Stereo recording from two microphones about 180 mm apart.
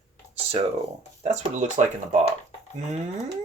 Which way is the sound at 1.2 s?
40° right (ahead or behind).